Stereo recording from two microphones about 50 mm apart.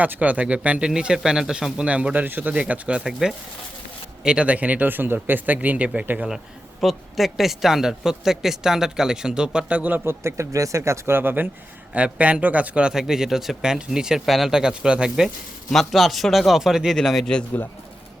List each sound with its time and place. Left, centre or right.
0.0 s a man's voice: right
0.9 s a man's voice: centre
2.1 s speech: right
2.5 s a man's voice: right
3.1 s speech: centre; by 5.5 s right
5.5 s a man's voice: right
6.8 s speech: centre; by 10.1 s right
10.1 s speech: right
11.1 s speech: right
11.9 s a man's voice: right
12.9 s speech: centre
14.6 s speech: centre
15.7 s speech: centre